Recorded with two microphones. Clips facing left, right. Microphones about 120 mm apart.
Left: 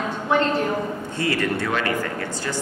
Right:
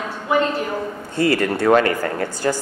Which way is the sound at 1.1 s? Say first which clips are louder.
Right 6 dB; 35° right (ahead or behind).